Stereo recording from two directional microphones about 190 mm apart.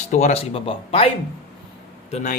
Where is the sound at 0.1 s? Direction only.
40° left (ahead or behind).